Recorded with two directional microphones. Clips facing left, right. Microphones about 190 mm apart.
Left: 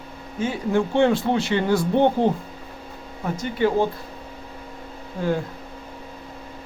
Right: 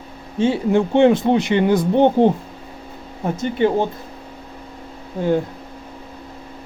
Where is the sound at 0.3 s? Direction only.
25° right (ahead or behind).